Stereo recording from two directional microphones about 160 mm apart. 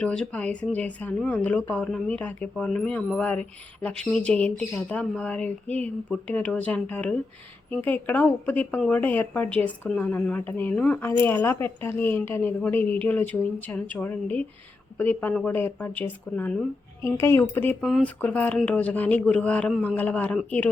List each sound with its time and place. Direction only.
0.0 s speech: 5° left (ahead or behind)
17.7 s speech: centre (ahead or behind)